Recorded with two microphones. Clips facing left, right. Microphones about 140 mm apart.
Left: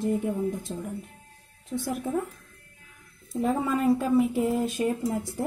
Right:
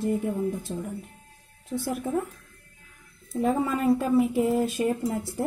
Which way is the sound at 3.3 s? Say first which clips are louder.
Right 1 dB; centre (ahead or behind).